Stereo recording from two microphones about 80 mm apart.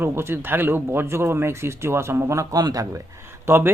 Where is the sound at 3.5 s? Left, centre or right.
Right.